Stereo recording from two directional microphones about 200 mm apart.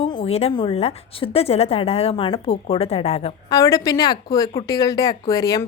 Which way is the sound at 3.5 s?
20° left (ahead or behind).